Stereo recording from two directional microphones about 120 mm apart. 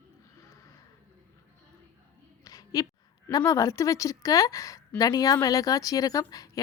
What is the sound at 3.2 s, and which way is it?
A woman's voice, 25° left (ahead or behind).